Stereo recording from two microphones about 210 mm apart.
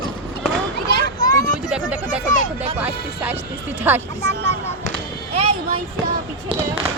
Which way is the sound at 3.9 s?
10° right (ahead or behind).